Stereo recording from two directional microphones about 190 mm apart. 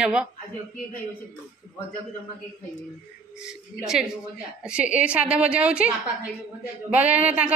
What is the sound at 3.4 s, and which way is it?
A woman's voice, 5° right (ahead or behind).